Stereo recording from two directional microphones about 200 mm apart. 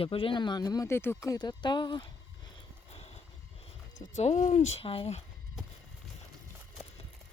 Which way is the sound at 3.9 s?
35° left (ahead or behind).